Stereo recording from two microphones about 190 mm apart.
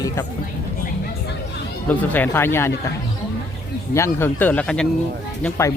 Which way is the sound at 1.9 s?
10° left (ahead or behind).